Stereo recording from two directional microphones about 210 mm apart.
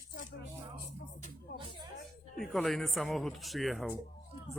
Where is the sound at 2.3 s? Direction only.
Centre (ahead or behind).